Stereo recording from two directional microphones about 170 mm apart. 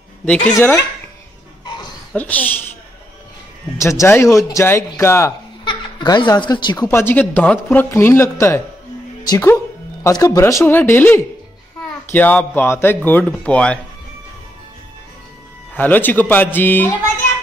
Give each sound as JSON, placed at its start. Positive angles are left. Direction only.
{"t": 0.5, "sound": "speech", "side_deg": 15}
{"t": 2.1, "sound": "speech", "side_deg": 10}
{"t": 3.7, "sound": "speech", "side_deg": 15}
{"t": 5.7, "sound": "speech", "side_deg": 25}
{"t": 6.9, "sound": "speech", "side_deg": 15}
{"t": 15.7, "sound": "speech", "side_deg": 10}